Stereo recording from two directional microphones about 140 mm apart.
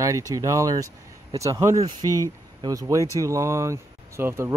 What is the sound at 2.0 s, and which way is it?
Speech, 20° left (ahead or behind).